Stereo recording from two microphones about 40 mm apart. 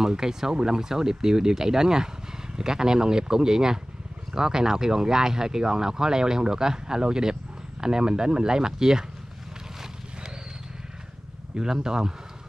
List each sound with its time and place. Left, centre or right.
0.0 s speech: centre
11.5 s speech: centre